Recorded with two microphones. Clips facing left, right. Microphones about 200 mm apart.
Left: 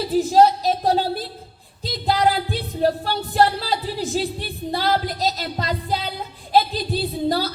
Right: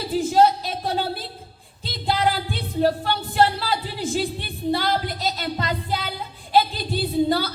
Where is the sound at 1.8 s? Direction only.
40° left (ahead or behind).